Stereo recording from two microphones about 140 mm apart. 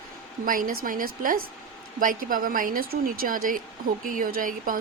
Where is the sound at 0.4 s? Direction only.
80° right.